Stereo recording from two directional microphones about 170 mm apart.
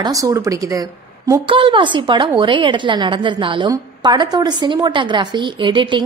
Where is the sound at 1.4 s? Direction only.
30° right (ahead or behind).